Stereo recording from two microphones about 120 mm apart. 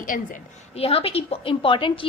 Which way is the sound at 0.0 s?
90° left.